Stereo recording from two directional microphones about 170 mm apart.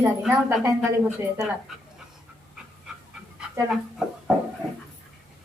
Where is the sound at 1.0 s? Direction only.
5° right (ahead or behind).